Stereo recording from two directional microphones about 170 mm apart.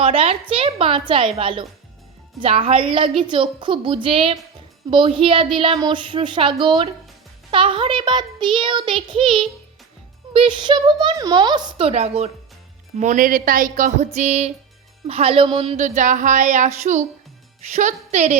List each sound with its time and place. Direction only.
0.0 s a woman's voice: 35° right (ahead or behind)
13.0 s a woman's voice: 50° right (ahead or behind)